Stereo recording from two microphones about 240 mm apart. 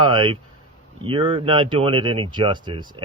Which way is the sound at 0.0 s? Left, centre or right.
Centre.